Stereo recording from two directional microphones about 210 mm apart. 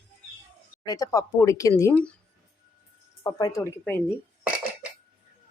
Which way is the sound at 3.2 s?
15° left (ahead or behind).